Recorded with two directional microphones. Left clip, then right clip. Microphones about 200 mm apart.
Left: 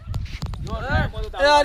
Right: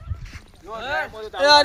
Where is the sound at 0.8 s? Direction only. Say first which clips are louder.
Even; 50° right (ahead or behind).